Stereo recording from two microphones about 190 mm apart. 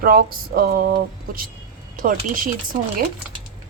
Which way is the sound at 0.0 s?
50° right (ahead or behind).